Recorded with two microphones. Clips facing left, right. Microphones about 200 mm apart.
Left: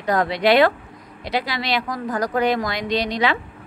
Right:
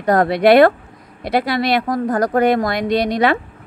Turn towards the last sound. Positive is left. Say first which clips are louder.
# right 5 dB
turn(degrees=-55)  # may be behind; listen again after turning